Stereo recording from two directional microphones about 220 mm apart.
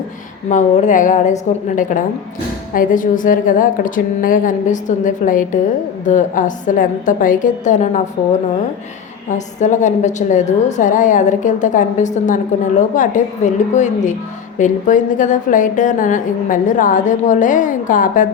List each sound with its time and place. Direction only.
0.4 s a woman's voice: 35° left (ahead or behind)
9.3 s a woman's voice: 35° left (ahead or behind)